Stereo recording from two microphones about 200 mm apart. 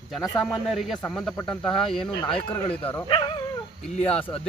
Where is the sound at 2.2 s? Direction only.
25° left (ahead or behind).